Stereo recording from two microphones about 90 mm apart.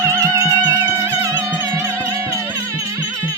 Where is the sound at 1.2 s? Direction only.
30° right (ahead or behind).